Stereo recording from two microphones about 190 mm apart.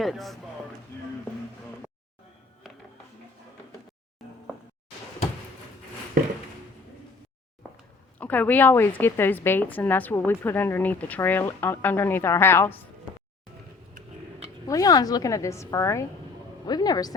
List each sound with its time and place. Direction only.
0.0 s speech: centre (ahead or behind)
8.2 s a woman's voice: 10° left (ahead or behind)
13.9 s tick-tock: 35° right (ahead or behind)
14.7 s a woman's voice: 20° left (ahead or behind)